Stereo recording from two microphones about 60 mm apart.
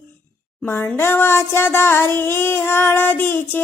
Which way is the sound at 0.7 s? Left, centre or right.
Left.